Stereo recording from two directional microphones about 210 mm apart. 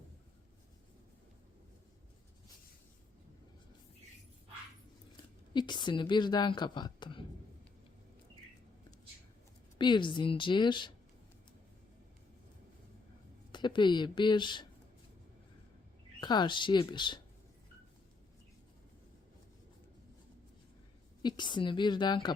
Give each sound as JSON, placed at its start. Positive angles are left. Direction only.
{"t": 5.5, "sound": "a woman's voice", "side_deg": 20}
{"t": 9.7, "sound": "a woman's voice", "side_deg": 20}
{"t": 13.5, "sound": "a woman's voice", "side_deg": 20}
{"t": 16.2, "sound": "a woman's voice", "side_deg": 20}
{"t": 21.2, "sound": "a woman's voice", "side_deg": 20}